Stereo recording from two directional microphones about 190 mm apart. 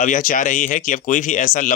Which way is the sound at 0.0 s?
45° left (ahead or behind).